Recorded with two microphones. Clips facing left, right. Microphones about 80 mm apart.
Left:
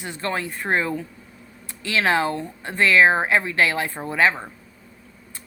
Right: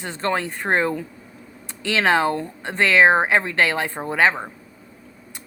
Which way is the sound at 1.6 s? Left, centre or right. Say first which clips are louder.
Right 2 dB; right.